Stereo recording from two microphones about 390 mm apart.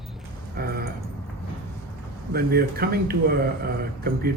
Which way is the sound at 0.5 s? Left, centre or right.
Right.